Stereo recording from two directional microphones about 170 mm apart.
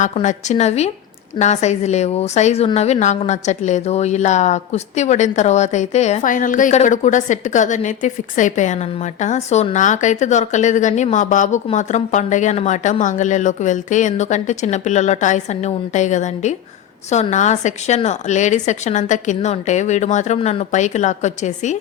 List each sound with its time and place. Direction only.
0.0 s a woman's voice: 45° left (ahead or behind)